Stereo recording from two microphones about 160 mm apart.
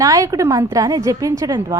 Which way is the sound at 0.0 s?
20° right (ahead or behind).